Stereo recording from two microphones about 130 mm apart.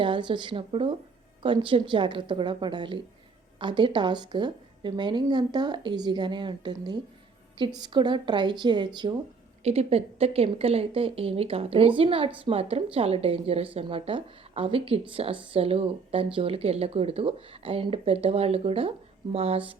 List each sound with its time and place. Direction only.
0.0 s a woman's voice: 40° right (ahead or behind)
9.6 s a woman's voice: 50° right (ahead or behind)